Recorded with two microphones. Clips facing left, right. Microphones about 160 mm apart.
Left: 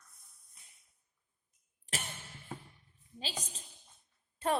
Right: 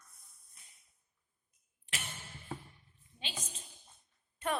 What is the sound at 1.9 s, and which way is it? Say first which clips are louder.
Music: left 4 dB; 40° left (ahead or behind).